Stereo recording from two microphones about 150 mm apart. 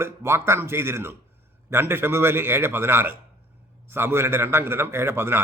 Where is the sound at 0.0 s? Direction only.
15° right (ahead or behind).